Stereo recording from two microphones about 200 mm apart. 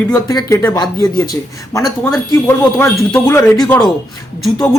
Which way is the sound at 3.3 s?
15° left (ahead or behind).